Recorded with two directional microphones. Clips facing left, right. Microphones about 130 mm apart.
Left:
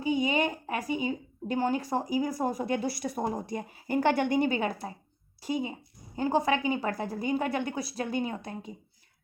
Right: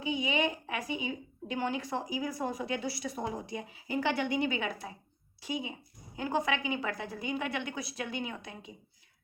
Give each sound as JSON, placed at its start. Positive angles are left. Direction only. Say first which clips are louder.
{"t": 0.0, "sound": "a woman's voice", "louder": "left 4 dB", "side_deg": 40}